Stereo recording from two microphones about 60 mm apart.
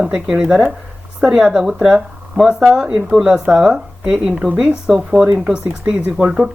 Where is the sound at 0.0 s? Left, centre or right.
Centre.